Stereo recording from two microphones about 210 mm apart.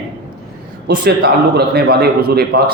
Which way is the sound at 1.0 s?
50° right (ahead or behind).